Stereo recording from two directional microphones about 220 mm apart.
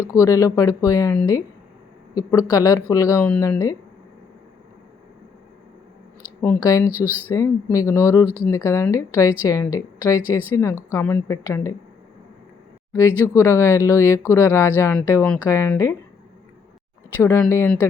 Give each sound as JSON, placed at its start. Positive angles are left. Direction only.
{"t": 0.1, "sound": "speech", "side_deg": 15}
{"t": 2.5, "sound": "speech", "side_deg": 15}
{"t": 6.4, "sound": "speech", "side_deg": 10}
{"t": 6.9, "sound": "speech", "side_deg": -10}
{"t": 7.3, "sound": "speech", "side_deg": 15}
{"t": 12.9, "sound": "speech", "side_deg": 15}
{"t": 17.2, "sound": "speech", "side_deg": 10}